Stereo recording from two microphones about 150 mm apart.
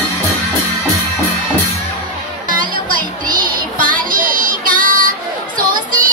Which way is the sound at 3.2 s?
65° right (ahead or behind).